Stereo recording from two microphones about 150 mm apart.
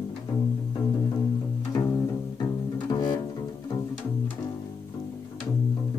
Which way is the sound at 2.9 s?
30° left (ahead or behind).